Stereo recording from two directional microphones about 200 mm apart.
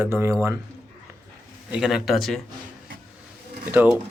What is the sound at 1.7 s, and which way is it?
Speech, centre (ahead or behind).